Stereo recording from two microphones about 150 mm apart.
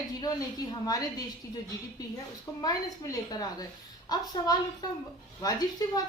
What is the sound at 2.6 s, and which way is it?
Speech, 25° left (ahead or behind).